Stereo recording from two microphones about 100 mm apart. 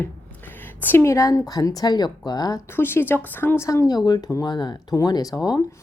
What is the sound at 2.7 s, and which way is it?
Speech, 20° left (ahead or behind).